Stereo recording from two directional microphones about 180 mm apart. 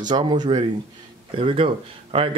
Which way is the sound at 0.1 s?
25° right (ahead or behind).